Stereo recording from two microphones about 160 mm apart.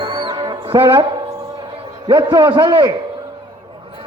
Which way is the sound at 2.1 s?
30° right (ahead or behind).